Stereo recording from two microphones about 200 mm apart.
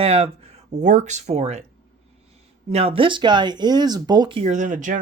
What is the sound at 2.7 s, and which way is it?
Speech, 30° right (ahead or behind).